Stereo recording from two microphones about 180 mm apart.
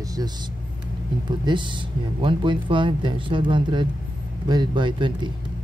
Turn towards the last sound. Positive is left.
turn(degrees=-25)  # may be behind; listen again after turning